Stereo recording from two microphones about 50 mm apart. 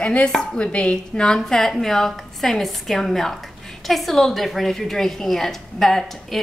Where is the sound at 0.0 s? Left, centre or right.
Left.